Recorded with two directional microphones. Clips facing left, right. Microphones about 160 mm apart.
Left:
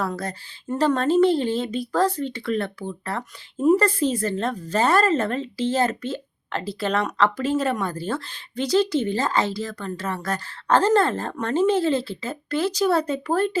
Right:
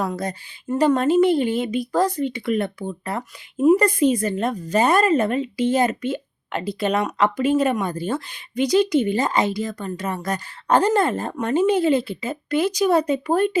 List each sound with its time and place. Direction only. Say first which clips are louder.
0.0 s speech: right 2 dB; 15° right (ahead or behind)